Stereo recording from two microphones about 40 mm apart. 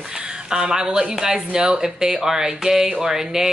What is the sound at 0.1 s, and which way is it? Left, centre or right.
Speech, centre.